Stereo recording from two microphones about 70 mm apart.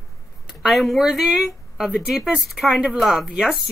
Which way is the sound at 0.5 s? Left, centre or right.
Centre.